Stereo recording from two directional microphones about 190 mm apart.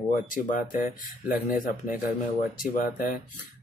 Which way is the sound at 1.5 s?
45° left (ahead or behind).